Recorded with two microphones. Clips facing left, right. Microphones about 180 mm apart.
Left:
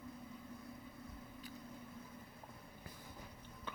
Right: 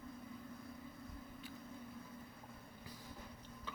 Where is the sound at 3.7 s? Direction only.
55° left (ahead or behind).